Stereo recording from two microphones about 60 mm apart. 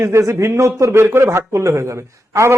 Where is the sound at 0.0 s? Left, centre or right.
Right.